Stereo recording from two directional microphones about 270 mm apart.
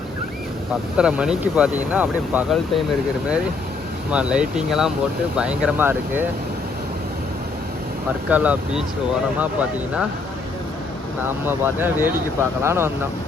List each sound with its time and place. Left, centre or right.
0.9 s speech: centre
4.1 s speech: centre
8.3 s speech: centre
11.4 s speech: centre